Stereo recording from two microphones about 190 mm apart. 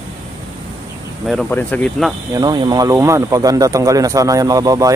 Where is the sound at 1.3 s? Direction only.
5° left (ahead or behind).